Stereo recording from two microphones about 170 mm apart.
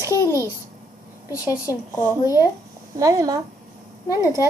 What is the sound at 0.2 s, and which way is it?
Babbling, 20° left (ahead or behind).